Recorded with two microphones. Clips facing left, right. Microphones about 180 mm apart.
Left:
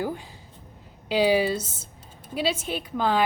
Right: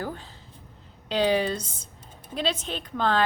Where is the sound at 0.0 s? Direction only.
10° left (ahead or behind).